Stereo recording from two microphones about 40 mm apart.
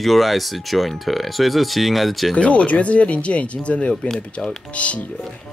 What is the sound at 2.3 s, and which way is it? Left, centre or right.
Speech, left.